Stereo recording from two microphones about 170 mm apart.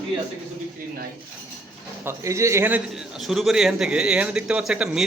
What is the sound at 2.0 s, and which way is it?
A man's voice, 15° right (ahead or behind).